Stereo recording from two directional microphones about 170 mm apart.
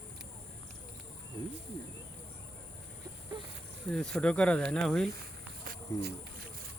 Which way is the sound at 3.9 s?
5° left (ahead or behind).